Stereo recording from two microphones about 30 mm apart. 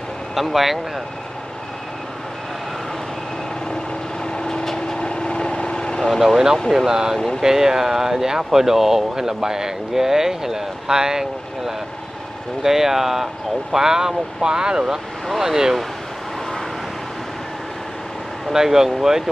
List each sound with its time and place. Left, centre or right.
0.3 s speech: centre
4.2 s vehicle: left
6.0 s speech: centre
6.9 s speech: right
18.5 s speech: centre